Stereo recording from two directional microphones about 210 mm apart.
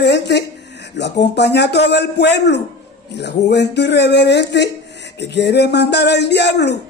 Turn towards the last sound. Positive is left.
turn(degrees=55)  # may be behind; listen again after turning